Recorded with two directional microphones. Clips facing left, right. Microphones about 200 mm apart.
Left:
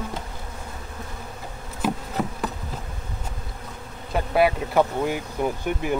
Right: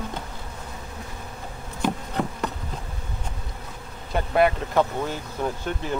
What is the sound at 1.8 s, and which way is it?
Insect, 5° left (ahead or behind).